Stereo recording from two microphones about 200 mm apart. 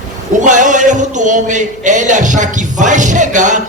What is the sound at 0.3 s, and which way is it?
A man's voice, 40° right (ahead or behind).